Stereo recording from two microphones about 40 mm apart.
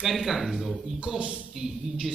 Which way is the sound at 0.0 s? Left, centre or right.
Centre.